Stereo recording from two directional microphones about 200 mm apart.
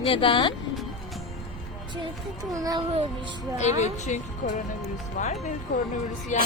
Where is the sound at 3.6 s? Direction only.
35° left (ahead or behind).